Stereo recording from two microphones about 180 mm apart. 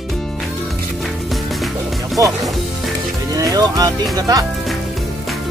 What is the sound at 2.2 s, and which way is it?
Music, 20° right (ahead or behind).